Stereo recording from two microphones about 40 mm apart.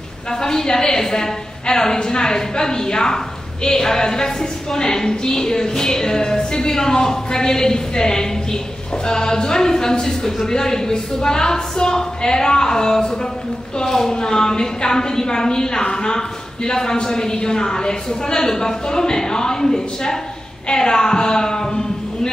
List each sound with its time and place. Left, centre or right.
0.3 s a woman's voice: centre